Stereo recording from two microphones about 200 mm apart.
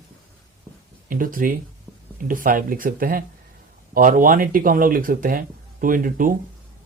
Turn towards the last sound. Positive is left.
turn(degrees=-45)  # may be behind; listen again after turning